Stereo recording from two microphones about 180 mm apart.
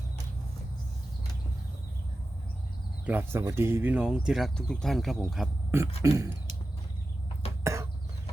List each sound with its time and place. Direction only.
3.1 s speech: 10° right (ahead or behind)
6.0 s speech: 20° right (ahead or behind)
7.6 s a sound: 15° right (ahead or behind)